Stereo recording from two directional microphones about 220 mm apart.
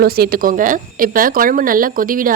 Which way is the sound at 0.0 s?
40° right (ahead or behind).